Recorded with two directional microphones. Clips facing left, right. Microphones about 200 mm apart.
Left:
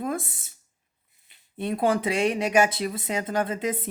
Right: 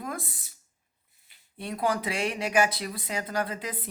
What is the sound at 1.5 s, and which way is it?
Speech, 25° left (ahead or behind).